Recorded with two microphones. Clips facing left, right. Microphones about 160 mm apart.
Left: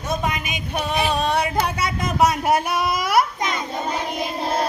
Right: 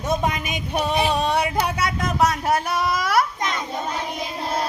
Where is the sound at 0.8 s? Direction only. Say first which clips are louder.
Right 1 dB; 30° right (ahead or behind).